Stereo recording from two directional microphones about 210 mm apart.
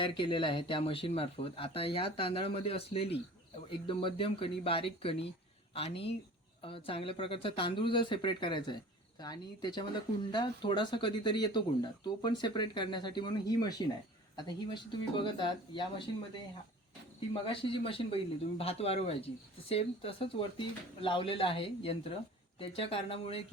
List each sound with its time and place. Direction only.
0.0 s speech: 25° left (ahead or behind)
17.5 s speech: 25° left (ahead or behind)